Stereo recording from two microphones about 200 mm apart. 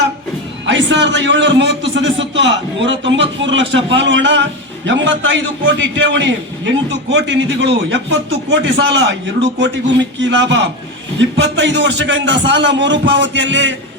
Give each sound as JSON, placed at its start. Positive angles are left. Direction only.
{"t": 0.7, "sound": "a man's voice", "side_deg": -60}